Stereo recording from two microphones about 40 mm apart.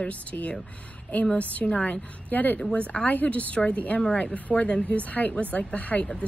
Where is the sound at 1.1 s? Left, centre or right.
Left.